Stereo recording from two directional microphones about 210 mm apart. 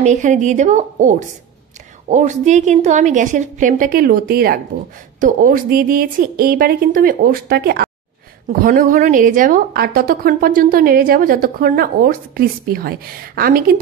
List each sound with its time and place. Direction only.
0.0 s a woman's voice: 35° right (ahead or behind)